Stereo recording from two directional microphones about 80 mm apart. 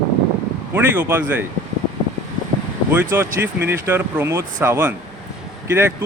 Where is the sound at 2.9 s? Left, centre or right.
Right.